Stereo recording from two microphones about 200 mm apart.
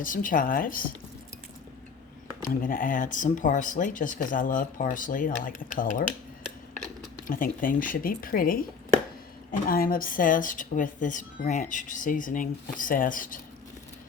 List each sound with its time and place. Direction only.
0.0 s speech: 45° left (ahead or behind)
2.5 s a woman's voice: 40° left (ahead or behind)
7.3 s a woman's voice: 45° left (ahead or behind)